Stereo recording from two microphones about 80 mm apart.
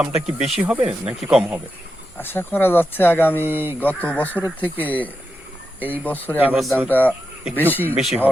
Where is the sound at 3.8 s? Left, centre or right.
Left.